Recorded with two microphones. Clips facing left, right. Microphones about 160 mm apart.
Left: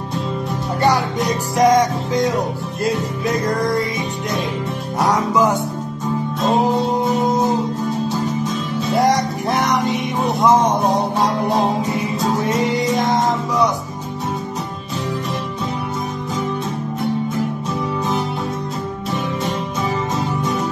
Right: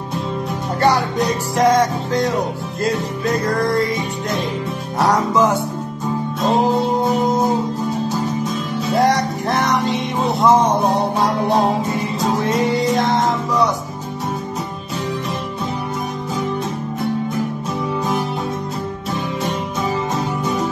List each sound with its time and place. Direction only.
1.6 s music: 15° left (ahead or behind)
4.9 s music: 10° left (ahead or behind)
9.5 s music: 15° left (ahead or behind)